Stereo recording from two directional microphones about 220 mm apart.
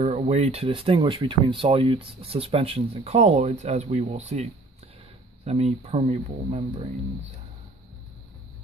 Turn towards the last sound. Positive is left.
turn(degrees=-30)  # may be behind; listen again after turning